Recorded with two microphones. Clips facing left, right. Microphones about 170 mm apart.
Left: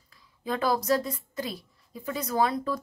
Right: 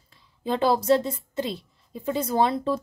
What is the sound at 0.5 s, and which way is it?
A woman's voice, 25° right (ahead or behind).